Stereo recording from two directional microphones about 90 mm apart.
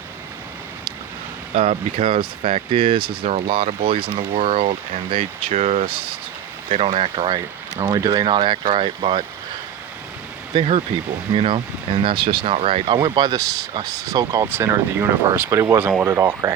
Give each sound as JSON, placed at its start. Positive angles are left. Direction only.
{"t": 1.5, "sound": "speech", "side_deg": -90}
{"t": 7.9, "sound": "speech", "side_deg": -50}
{"t": 10.5, "sound": "speech", "side_deg": -55}
{"t": 11.3, "sound": "speech", "side_deg": -75}
{"t": 13.1, "sound": "speech", "side_deg": -50}
{"t": 14.4, "sound": "speech", "side_deg": -25}